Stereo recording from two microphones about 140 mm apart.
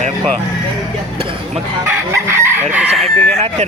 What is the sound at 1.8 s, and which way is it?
Chicken, 20° right (ahead or behind).